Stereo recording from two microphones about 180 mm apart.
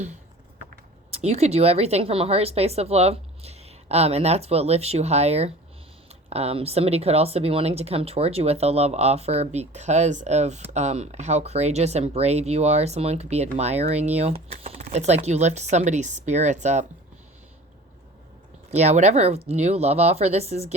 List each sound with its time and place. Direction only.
1.1 s speech: 35° right (ahead or behind)
18.7 s speech: 40° right (ahead or behind)